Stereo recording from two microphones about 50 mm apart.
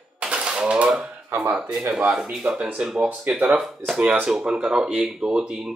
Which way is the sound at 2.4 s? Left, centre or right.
Right.